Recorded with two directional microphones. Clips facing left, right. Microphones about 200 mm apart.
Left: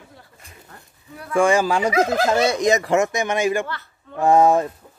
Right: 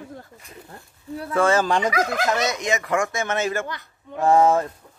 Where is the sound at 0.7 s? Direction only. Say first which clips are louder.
Right 9 dB; 25° right (ahead or behind).